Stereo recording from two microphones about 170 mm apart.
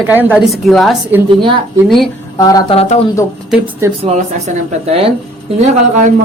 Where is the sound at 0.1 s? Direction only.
10° right (ahead or behind).